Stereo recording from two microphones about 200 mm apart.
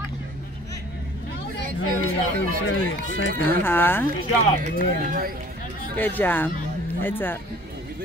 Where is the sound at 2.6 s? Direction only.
80° left.